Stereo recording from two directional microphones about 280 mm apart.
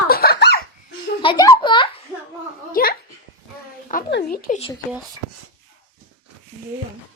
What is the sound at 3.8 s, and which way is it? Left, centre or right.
Speech, left.